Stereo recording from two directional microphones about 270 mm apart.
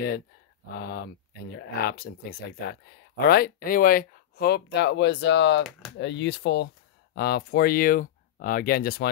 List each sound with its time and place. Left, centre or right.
0.7 s speech: left
3.3 s speech: left